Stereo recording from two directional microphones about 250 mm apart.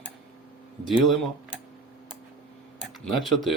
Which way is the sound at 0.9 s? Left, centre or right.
Centre.